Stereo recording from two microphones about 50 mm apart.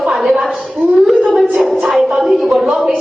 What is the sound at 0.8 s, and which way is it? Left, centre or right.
Speech, right.